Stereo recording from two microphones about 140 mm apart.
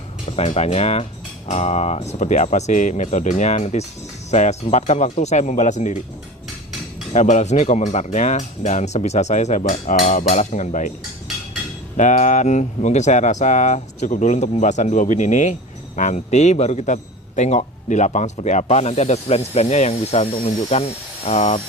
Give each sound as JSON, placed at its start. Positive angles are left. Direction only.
{"t": 0.3, "sound": "a man's voice", "side_deg": 50}
{"t": 7.1, "sound": "speech", "side_deg": 55}
{"t": 11.9, "sound": "a man's voice", "side_deg": 65}